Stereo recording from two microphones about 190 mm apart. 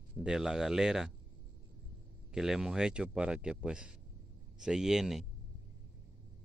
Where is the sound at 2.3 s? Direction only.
Centre (ahead or behind).